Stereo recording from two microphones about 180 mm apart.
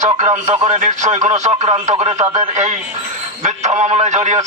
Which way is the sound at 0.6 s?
40° right (ahead or behind).